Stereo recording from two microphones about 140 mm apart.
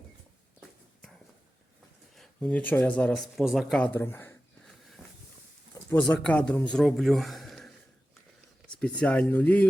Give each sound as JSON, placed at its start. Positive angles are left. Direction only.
{"t": 2.1, "sound": "speech", "side_deg": 5}
{"t": 3.3, "sound": "speech", "side_deg": 0}
{"t": 5.9, "sound": "speech", "side_deg": 10}
{"t": 8.7, "sound": "speech", "side_deg": 10}